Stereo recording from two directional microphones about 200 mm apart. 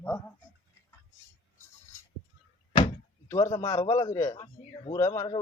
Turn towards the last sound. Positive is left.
turn(degrees=20)  # may be behind; listen again after turning